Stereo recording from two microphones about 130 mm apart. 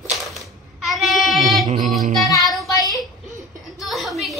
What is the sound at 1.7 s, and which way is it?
Music, 80° right.